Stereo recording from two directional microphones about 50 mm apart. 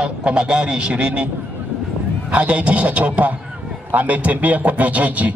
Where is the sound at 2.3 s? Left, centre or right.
Right.